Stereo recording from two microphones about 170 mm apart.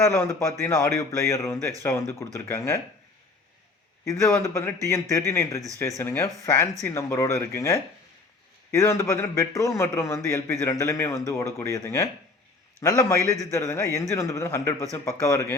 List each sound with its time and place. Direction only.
0.0 s a man's voice: 15° left (ahead or behind)
4.0 s a man's voice: 20° left (ahead or behind)